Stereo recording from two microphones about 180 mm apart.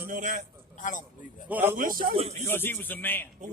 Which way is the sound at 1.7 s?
50° right (ahead or behind).